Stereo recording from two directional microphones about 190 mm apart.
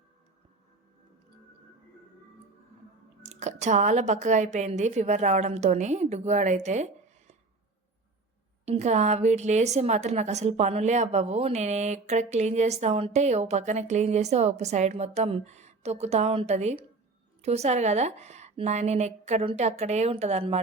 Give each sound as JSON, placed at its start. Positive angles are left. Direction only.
{"t": 3.2, "sound": "a woman's voice", "side_deg": -35}
{"t": 8.6, "sound": "a woman's voice", "side_deg": -35}